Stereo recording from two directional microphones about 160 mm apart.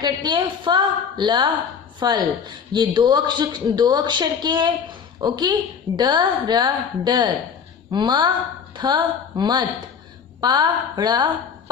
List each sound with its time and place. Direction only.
0.0 s a woman's voice: 30° right (ahead or behind)